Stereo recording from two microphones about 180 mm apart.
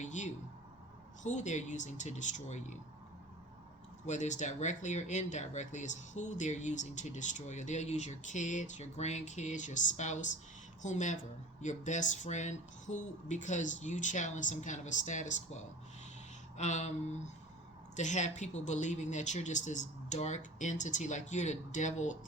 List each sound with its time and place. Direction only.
0.0 s a sound: 40° left (ahead or behind)
1.2 s speech: 40° left (ahead or behind)
4.0 s speech: 40° left (ahead or behind)